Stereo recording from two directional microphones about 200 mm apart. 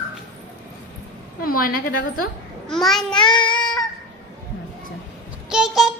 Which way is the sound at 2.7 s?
Centre (ahead or behind).